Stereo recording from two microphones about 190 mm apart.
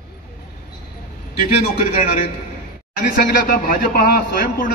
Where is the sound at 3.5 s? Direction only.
50° left (ahead or behind).